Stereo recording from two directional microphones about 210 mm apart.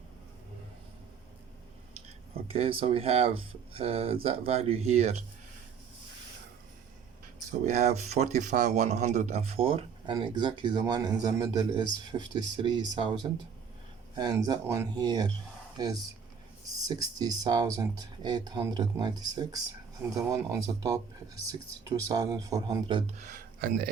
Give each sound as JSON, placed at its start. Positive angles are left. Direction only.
{"t": 2.5, "sound": "speech", "side_deg": -25}
{"t": 7.6, "sound": "speech", "side_deg": -35}
{"t": 14.2, "sound": "speech", "side_deg": -20}
{"t": 16.8, "sound": "speech", "side_deg": -15}
{"t": 23.2, "sound": "speech", "side_deg": -40}